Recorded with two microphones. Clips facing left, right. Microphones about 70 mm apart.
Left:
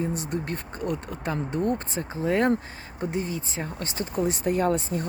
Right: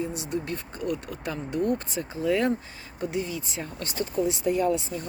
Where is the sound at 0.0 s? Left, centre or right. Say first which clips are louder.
Left 1 dB; left.